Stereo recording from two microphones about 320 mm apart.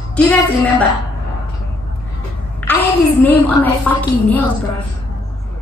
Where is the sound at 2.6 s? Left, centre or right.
Centre.